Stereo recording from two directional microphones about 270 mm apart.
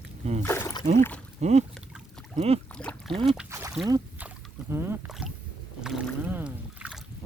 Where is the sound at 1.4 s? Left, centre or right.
Right.